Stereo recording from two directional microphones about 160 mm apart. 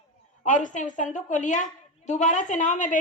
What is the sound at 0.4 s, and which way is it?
A woman's voice, 50° left (ahead or behind).